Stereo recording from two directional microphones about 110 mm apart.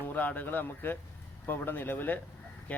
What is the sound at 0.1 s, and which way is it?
Speech, 15° left (ahead or behind).